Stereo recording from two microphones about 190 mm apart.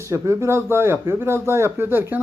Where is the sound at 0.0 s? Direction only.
15° right (ahead or behind).